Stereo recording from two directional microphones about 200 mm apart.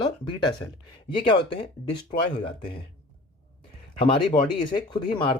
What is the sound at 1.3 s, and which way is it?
Speech, 25° left (ahead or behind).